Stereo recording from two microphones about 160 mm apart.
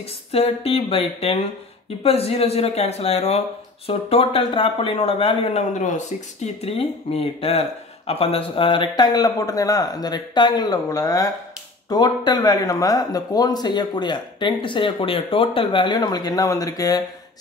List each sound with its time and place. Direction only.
0.3 s speech: 35° left (ahead or behind)